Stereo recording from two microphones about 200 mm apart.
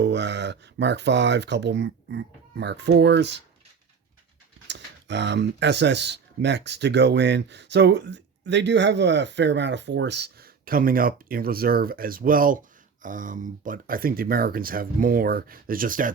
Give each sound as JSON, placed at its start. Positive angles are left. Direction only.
{"t": 0.0, "sound": "speech", "side_deg": -60}
{"t": 4.7, "sound": "speech", "side_deg": -60}